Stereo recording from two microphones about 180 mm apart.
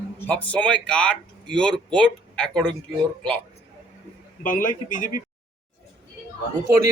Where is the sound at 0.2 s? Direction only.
10° left (ahead or behind).